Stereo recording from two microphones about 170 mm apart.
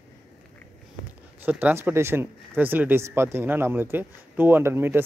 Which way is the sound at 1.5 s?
10° right (ahead or behind).